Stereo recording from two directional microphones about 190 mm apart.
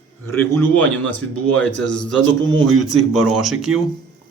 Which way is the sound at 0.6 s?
5° left (ahead or behind).